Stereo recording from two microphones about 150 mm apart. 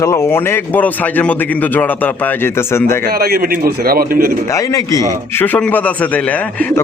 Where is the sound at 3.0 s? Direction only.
90° right.